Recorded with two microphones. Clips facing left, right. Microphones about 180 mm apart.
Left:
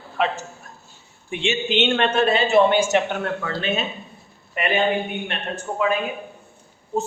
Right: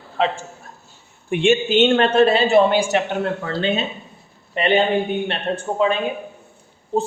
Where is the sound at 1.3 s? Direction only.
50° right (ahead or behind).